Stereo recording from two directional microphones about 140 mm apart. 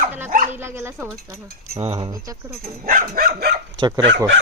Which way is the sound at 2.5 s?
80° right.